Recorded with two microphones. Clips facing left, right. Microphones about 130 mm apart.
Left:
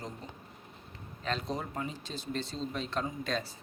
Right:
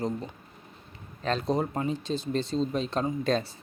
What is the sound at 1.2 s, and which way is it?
Speech, 35° right (ahead or behind).